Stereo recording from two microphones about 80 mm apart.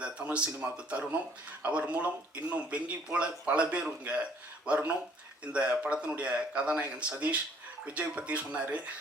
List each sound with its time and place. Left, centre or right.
0.0 s a man's voice: centre